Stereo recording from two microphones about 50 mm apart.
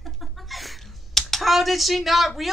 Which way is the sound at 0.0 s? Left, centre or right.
Centre.